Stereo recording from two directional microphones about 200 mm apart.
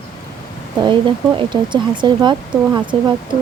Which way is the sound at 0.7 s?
25° right (ahead or behind).